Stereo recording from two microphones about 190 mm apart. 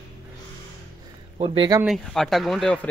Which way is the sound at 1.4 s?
25° right (ahead or behind).